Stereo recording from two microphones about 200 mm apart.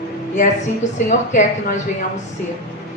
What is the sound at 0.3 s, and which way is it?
Speech, 35° left (ahead or behind).